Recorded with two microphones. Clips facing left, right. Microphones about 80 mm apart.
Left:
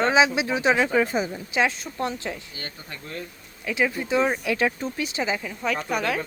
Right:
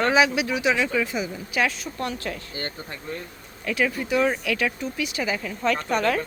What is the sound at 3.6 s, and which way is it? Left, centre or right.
Speech, centre.